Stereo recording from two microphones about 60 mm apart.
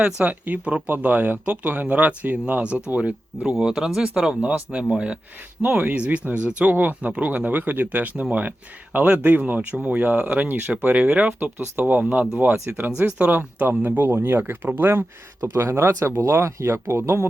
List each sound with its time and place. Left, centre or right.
0.0 s speech: right
3.6 s speech: centre; by 15.0 s right
15.5 s speech: right